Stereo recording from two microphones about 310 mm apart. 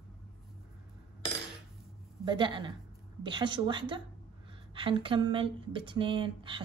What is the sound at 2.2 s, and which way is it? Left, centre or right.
Speech, centre.